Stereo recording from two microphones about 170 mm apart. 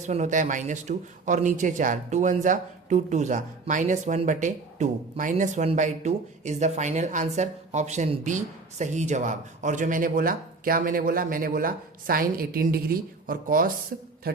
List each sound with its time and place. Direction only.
0.0 s speech: 45° right (ahead or behind)